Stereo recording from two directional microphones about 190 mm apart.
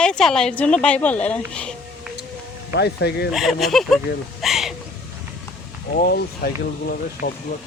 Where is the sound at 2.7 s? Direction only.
60° left (ahead or behind).